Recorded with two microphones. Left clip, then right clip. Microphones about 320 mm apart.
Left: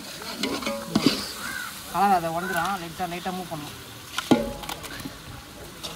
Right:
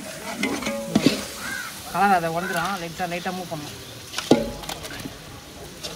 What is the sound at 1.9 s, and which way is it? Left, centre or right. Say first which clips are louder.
Speech: right 2 dB; centre.